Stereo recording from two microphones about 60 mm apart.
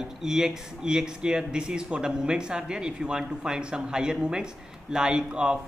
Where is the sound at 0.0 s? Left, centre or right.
Centre.